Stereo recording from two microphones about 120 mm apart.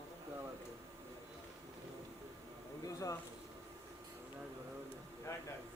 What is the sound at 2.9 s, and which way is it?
Speech, 30° left (ahead or behind).